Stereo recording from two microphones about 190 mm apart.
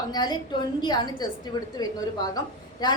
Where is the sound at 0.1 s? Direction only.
20° left (ahead or behind).